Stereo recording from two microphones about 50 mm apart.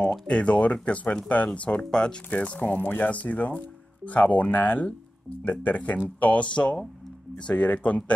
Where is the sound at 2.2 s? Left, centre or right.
Left.